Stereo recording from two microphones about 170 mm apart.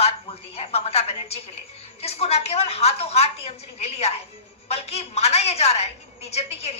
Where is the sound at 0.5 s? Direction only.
35° left (ahead or behind).